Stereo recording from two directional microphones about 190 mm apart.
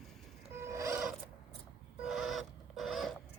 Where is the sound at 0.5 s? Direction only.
15° right (ahead or behind).